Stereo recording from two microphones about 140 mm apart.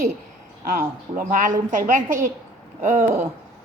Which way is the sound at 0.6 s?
90° right.